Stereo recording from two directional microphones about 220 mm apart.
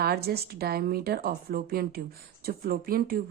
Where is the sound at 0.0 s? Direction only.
45° right (ahead or behind).